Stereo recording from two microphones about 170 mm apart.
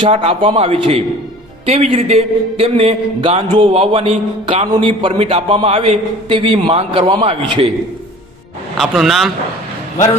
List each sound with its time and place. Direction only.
0.0 s a man's voice: 35° right (ahead or behind)
8.8 s speech: centre (ahead or behind)